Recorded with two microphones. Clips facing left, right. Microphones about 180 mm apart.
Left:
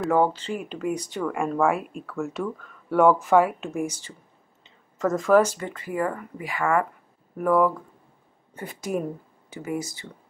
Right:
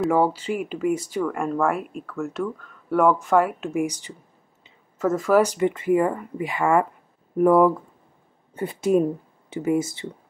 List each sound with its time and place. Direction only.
0.0 s speech: 5° right (ahead or behind)
3.8 s speech: 15° right (ahead or behind)